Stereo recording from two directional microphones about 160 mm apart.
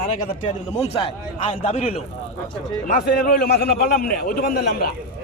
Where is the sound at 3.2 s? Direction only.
60° left (ahead or behind).